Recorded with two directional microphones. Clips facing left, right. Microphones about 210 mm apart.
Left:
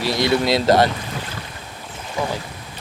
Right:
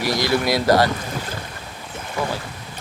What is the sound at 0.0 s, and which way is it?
Speech, 25° left (ahead or behind).